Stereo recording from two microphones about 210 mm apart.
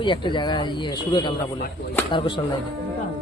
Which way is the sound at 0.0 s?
20° left (ahead or behind).